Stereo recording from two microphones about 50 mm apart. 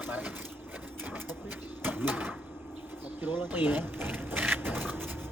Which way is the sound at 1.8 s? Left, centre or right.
Right.